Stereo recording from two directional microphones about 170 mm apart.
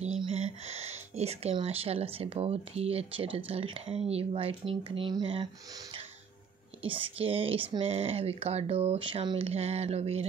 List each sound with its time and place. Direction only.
0.2 s speech: 35° right (ahead or behind)
6.8 s speech: 30° right (ahead or behind)